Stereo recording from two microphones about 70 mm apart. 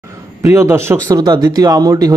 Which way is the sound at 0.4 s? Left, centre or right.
Right.